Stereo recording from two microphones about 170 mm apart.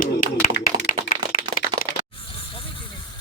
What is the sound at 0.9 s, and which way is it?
Clapping, 55° left (ahead or behind).